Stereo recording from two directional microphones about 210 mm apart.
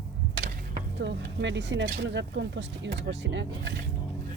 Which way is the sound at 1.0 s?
55° right (ahead or behind).